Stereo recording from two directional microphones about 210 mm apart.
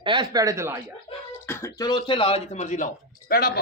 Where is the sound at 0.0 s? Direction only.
20° right (ahead or behind).